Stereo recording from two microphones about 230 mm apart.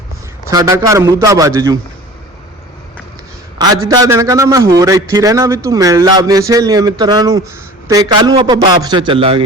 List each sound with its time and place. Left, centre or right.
0.5 s speech: centre
3.8 s a man's voice: centre